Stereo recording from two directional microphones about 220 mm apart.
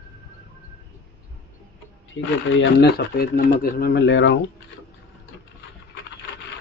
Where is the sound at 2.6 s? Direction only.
50° left (ahead or behind).